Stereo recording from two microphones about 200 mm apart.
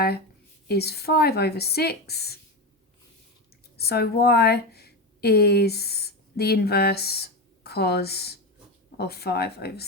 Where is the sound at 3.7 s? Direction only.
50° left (ahead or behind).